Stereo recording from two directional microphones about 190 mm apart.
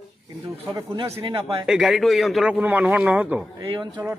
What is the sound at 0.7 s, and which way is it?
Speech, 15° right (ahead or behind).